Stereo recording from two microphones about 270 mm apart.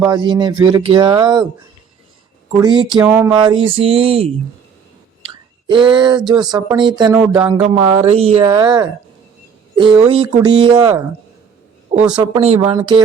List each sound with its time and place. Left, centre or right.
0.0 s speech: centre
2.6 s speech: centre
3.0 s a sound: centre
3.5 s speech: centre
5.6 s speech: centre
12.2 s speech: centre